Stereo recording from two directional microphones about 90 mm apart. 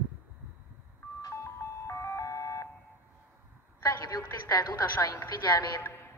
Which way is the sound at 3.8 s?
40° left (ahead or behind).